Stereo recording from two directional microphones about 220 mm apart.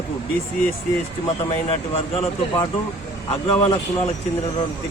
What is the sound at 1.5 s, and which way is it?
A man's voice, 25° left (ahead or behind).